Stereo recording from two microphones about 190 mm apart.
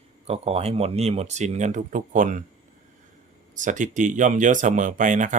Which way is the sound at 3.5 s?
40° right (ahead or behind).